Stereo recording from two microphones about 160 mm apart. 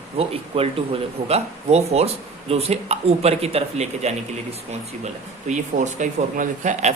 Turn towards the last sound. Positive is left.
turn(degrees=-50)  # may be behind; listen again after turning